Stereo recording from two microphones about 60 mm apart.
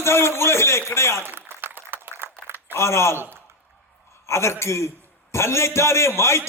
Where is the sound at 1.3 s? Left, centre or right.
Right.